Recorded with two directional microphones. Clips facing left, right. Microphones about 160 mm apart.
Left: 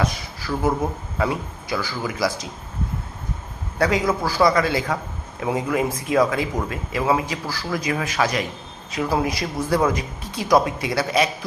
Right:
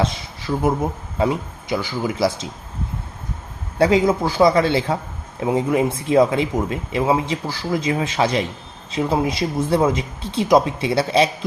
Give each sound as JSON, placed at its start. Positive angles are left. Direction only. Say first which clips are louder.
{"t": 0.0, "sound": "speech", "louder": "right 2 dB", "side_deg": -25}
{"t": 3.8, "sound": "speech", "louder": "right 5 dB", "side_deg": -25}